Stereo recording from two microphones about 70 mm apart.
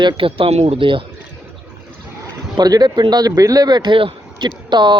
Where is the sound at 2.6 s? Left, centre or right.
Right.